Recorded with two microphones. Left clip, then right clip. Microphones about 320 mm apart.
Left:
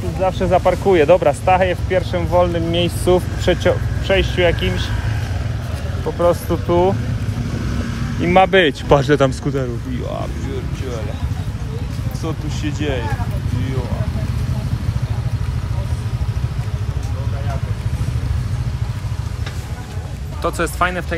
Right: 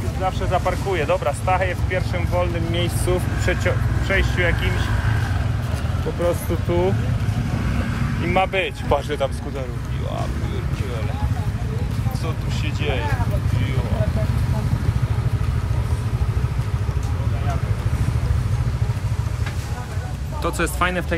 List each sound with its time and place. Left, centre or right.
0.2 s speech: left
6.2 s speech: left
8.2 s speech: left
20.4 s speech: centre